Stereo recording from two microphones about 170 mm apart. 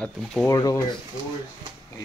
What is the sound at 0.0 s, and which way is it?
Speech, 5° left (ahead or behind).